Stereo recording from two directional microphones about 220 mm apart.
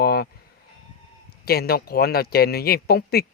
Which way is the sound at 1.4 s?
45° left (ahead or behind).